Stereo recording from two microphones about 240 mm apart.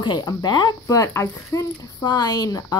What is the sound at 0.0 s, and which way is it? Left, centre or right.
A woman's voice, centre.